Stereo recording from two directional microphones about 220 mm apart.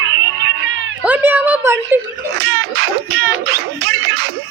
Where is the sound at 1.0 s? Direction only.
5° right (ahead or behind).